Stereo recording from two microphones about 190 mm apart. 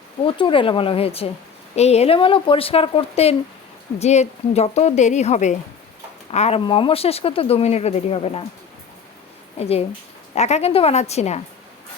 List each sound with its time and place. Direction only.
0.3 s speech: 25° left (ahead or behind)
9.6 s speech: 35° left (ahead or behind)